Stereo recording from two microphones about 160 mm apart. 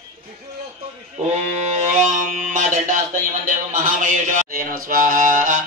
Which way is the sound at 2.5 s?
55° right (ahead or behind).